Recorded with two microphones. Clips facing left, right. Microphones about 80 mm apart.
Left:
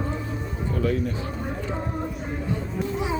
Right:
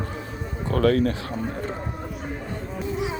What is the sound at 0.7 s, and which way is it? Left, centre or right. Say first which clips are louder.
Speech: right 6 dB; right.